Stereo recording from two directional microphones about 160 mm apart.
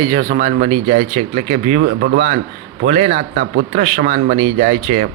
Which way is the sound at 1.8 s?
90° right.